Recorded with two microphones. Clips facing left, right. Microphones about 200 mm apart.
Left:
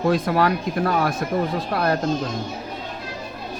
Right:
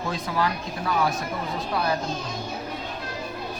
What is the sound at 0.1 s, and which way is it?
Speech, 60° left (ahead or behind).